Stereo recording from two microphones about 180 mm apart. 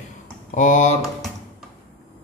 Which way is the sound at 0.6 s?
45° left (ahead or behind).